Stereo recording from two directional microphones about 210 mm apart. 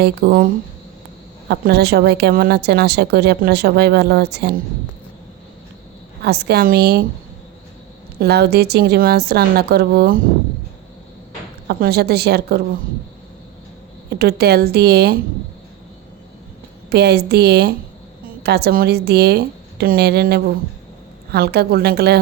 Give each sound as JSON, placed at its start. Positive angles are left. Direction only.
{"t": 0.0, "sound": "speech", "side_deg": -45}
{"t": 6.2, "sound": "speech", "side_deg": -50}
{"t": 8.2, "sound": "speech", "side_deg": -50}
{"t": 11.7, "sound": "speech", "side_deg": -50}
{"t": 14.1, "sound": "speech", "side_deg": -50}
{"t": 16.9, "sound": "speech", "side_deg": -50}